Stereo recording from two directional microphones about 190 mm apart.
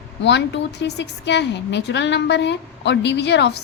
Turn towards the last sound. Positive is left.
turn(degrees=65)  # may be behind; listen again after turning